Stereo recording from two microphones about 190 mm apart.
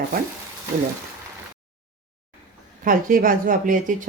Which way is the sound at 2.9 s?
45° right (ahead or behind).